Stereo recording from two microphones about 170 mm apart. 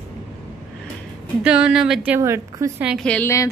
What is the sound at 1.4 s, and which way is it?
A woman's voice, 5° right (ahead or behind).